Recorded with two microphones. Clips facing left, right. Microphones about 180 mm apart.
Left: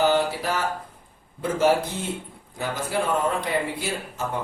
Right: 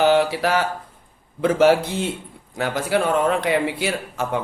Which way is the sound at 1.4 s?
80° right.